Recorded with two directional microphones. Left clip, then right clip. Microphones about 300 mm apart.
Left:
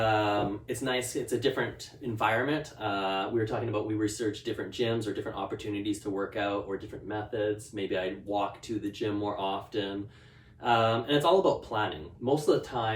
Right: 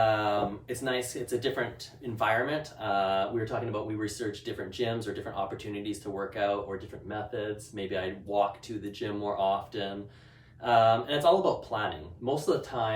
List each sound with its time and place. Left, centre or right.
0.0 s speech: centre